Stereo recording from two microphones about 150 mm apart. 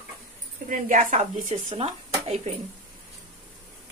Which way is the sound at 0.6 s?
60° right (ahead or behind).